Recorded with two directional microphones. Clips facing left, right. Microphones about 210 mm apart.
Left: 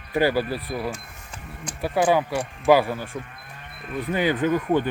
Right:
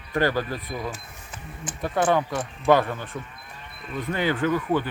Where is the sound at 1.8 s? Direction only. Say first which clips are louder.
Left 2 dB; 10° left (ahead or behind).